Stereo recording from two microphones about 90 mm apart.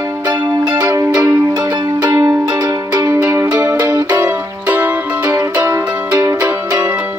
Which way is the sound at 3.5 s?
40° right (ahead or behind).